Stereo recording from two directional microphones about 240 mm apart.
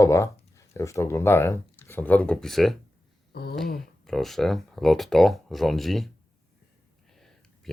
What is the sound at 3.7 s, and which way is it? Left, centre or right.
Speech, centre.